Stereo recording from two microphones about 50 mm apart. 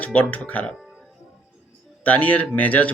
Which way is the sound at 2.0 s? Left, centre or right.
Left.